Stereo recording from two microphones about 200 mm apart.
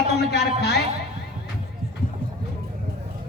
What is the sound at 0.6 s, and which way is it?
Speech, 55° left (ahead or behind).